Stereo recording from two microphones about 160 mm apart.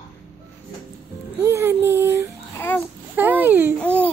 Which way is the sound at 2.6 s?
15° left (ahead or behind).